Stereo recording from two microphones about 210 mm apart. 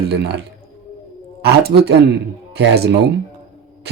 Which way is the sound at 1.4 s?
50° right (ahead or behind).